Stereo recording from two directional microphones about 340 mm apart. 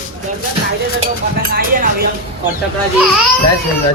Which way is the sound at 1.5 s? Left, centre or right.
Right.